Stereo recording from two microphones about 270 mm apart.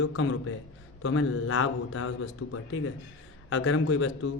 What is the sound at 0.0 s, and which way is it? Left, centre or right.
A man's voice, left.